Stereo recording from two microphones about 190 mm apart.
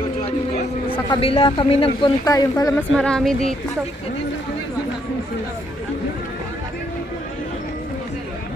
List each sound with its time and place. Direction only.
1.1 s speech: 30° left (ahead or behind)
2.9 s speech: 5° left (ahead or behind)